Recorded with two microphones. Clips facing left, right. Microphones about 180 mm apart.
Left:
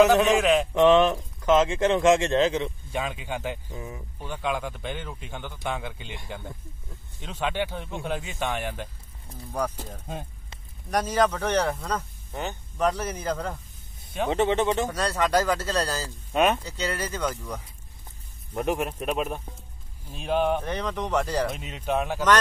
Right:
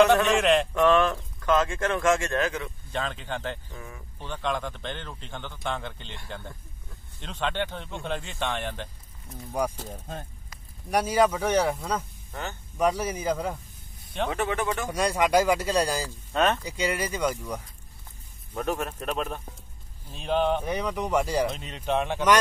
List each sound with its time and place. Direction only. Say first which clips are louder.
0.3 s a man's voice: left 1 dB; centre (ahead or behind)
0.7 s speech: left 3 dB; 20° left (ahead or behind)
2.9 s speech: right 2 dB; 10° left (ahead or behind)
9.6 s speech: right 1 dB; 10° right (ahead or behind)
10.9 s speech: right 1 dB; 10° right (ahead or behind)
12.3 s speech: left 4 dB; 20° left (ahead or behind)
12.7 s speech: right 1 dB; 10° right (ahead or behind)
14.3 s speech: left 7 dB; 25° left (ahead or behind)
14.9 s speech: right 1 dB; 10° right (ahead or behind)
16.3 s speech: left 2 dB; 15° left (ahead or behind)
16.6 s speech: right 2 dB; 10° right (ahead or behind)
18.5 s speech: left 3 dB; 15° left (ahead or behind)
20.6 s speech: right 1 dB; 10° right (ahead or behind)
21.5 s speech: even; 10° left (ahead or behind)